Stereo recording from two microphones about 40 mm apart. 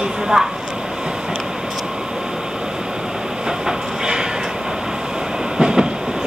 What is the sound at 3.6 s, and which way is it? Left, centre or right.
Train, centre.